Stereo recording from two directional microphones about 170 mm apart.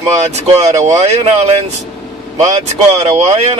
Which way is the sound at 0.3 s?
40° right (ahead or behind).